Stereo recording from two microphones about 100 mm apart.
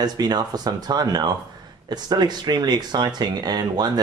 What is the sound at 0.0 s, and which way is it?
Speech, 40° right (ahead or behind).